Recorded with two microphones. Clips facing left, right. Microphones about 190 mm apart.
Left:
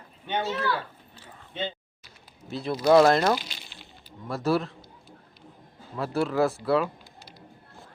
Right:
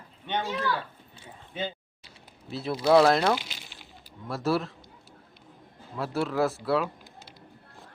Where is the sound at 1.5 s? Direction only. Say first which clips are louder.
Left 1 dB; 10° right (ahead or behind).